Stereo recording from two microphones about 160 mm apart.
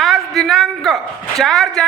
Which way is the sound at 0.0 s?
Centre (ahead or behind).